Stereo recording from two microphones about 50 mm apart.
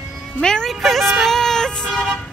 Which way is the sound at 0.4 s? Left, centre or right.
Centre.